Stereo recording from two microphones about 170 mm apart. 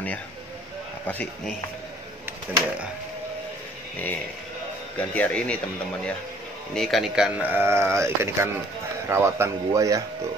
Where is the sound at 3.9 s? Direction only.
10° left (ahead or behind).